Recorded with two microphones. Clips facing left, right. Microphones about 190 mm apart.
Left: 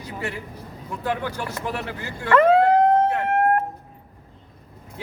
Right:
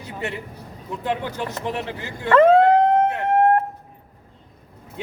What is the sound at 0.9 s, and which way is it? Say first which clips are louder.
A man's voice: right 1 dB; 20° right (ahead or behind).